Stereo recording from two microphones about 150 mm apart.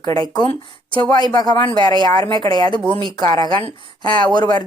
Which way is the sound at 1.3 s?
30° left (ahead or behind).